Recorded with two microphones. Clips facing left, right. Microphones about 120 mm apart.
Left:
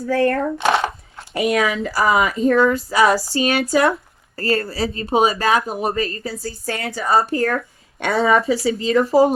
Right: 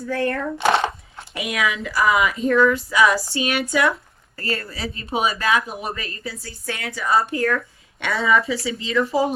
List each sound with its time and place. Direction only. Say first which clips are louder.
0.0 s speech: left 5 dB; 35° left (ahead or behind)